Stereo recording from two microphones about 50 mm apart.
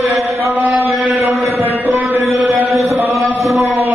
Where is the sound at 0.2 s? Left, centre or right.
Right.